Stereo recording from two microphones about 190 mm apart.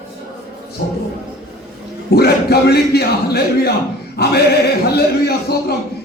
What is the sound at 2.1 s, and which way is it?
A man's voice, 55° left (ahead or behind).